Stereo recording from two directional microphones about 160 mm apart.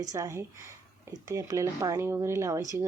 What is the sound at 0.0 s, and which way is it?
Speech, 20° right (ahead or behind).